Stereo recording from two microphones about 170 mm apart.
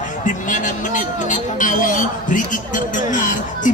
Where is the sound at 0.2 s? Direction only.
50° left (ahead or behind).